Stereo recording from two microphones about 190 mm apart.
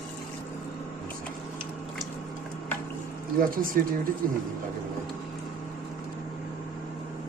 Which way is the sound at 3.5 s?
50° right (ahead or behind).